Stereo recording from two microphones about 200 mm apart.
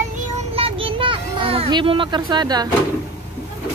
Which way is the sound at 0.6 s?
25° right (ahead or behind).